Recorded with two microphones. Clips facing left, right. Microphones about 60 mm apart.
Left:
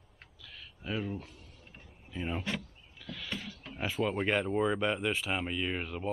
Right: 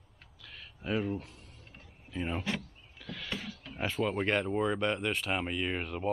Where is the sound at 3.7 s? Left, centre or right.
Centre.